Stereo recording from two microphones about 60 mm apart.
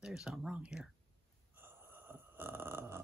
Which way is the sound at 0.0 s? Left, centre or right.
Centre.